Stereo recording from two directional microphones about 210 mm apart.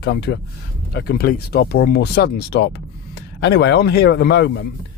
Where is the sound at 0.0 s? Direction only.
50° left (ahead or behind).